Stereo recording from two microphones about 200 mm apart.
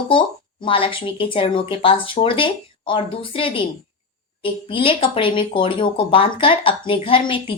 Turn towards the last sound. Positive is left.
turn(degrees=25)  # may be behind; listen again after turning